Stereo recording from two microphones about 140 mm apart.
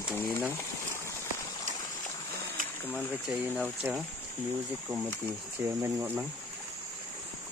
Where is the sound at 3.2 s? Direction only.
5° left (ahead or behind).